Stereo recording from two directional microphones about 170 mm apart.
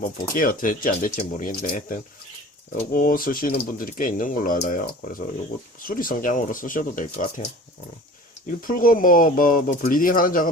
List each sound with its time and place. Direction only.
0.0 s speech: 55° left (ahead or behind)
8.4 s speech: 55° left (ahead or behind)